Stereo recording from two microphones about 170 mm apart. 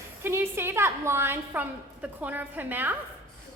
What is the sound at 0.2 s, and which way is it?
A woman's voice, 15° right (ahead or behind).